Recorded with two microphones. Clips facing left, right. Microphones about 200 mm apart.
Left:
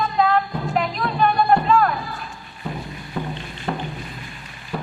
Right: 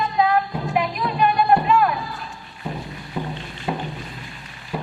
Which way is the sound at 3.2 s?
10° right (ahead or behind).